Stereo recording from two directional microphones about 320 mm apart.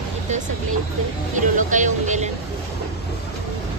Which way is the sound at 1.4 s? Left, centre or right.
Right.